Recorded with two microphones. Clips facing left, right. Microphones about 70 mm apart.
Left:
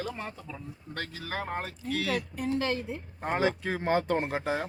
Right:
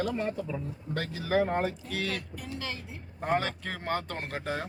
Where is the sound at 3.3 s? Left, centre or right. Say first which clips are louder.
Left 2 dB; centre.